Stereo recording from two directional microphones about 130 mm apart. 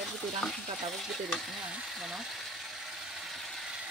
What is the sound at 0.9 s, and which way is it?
Speech, centre (ahead or behind).